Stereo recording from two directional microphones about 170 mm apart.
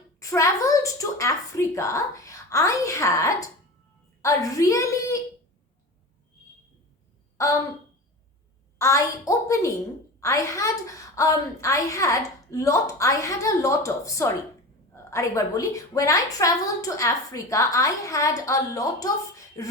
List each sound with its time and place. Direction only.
0.2 s a woman's voice: 20° left (ahead or behind)
7.3 s speech: 20° left (ahead or behind)
8.8 s a woman's voice: 20° left (ahead or behind)